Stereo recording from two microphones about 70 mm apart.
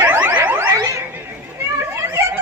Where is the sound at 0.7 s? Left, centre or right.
Right.